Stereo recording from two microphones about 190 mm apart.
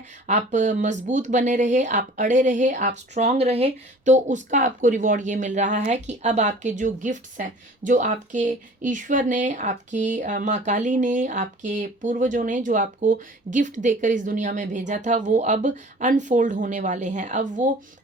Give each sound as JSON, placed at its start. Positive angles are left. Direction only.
{"t": 0.3, "sound": "speech", "side_deg": -40}